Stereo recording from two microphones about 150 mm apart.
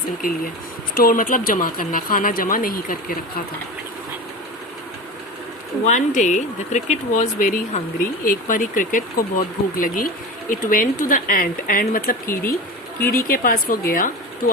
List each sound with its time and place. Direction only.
0.2 s speech: 70° left (ahead or behind)
5.8 s speech: 55° left (ahead or behind); by 12.5 s 75° left (ahead or behind)
13.0 s speech: 15° left (ahead or behind)
13.2 s speech: 75° left (ahead or behind)